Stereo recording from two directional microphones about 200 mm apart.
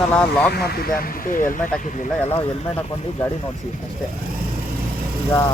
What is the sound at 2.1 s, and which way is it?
Speech, 10° left (ahead or behind).